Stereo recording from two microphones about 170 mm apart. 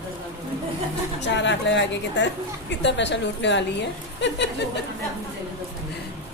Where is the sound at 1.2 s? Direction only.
90° left.